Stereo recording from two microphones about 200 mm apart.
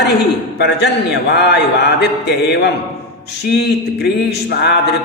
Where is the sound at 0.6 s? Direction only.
55° left (ahead or behind).